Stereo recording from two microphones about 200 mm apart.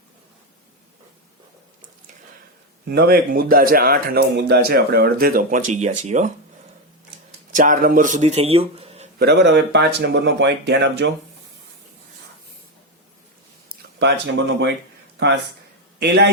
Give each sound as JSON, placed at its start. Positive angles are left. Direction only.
{"t": 2.9, "sound": "a man's voice", "side_deg": -50}
{"t": 7.5, "sound": "speech", "side_deg": -40}
{"t": 9.1, "sound": "speech", "side_deg": -55}
{"t": 14.0, "sound": "speech", "side_deg": -60}
{"t": 16.0, "sound": "speech", "side_deg": -55}